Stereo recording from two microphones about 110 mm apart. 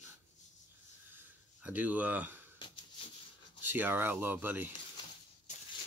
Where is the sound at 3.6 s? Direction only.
20° right (ahead or behind).